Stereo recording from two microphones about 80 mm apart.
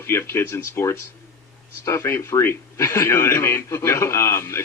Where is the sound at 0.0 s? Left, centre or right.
Left.